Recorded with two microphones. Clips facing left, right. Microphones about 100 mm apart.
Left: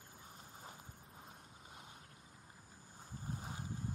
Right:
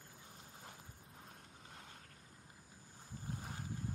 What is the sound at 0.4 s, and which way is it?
Vehicle, 10° left (ahead or behind).